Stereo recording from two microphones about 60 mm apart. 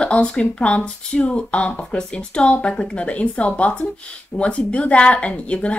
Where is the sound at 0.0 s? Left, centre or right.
Centre.